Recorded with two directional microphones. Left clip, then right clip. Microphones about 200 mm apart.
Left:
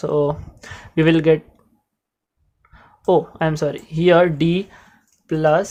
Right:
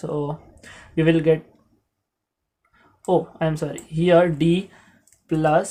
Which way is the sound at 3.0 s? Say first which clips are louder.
Left 4 dB; 35° left (ahead or behind).